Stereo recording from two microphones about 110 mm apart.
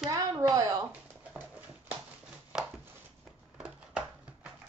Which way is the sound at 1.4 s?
15° right (ahead or behind).